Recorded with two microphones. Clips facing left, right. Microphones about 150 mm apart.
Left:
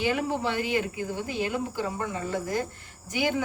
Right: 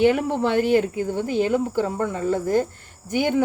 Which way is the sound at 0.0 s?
60° right (ahead or behind).